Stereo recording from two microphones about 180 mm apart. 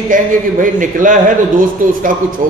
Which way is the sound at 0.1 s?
45° right (ahead or behind).